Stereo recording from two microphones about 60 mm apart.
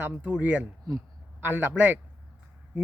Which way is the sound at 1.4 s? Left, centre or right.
Right.